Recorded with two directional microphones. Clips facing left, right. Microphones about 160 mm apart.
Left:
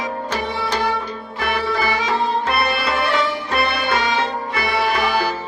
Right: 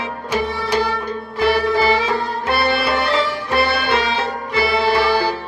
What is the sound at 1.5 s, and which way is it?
Music, 30° right (ahead or behind).